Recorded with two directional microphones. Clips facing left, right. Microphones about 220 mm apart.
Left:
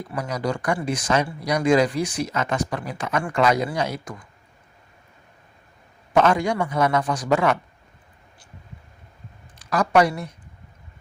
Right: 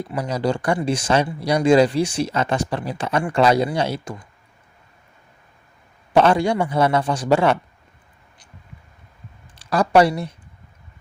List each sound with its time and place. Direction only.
0.1 s speech: 30° right (ahead or behind)
6.1 s speech: 30° right (ahead or behind)
9.6 s speech: 30° right (ahead or behind)